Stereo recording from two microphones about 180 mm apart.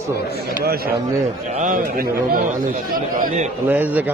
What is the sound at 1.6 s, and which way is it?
A man's voice, 50° right (ahead or behind).